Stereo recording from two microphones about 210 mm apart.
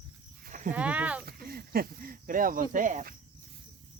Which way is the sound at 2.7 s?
35° right (ahead or behind).